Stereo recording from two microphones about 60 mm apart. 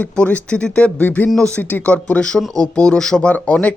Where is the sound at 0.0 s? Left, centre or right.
Left.